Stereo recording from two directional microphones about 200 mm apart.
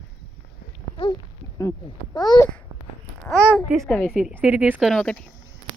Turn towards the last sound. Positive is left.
turn(degrees=5)  # may be behind; listen again after turning